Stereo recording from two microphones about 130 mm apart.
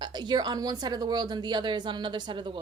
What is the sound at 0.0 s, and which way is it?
A woman's voice, 35° right (ahead or behind).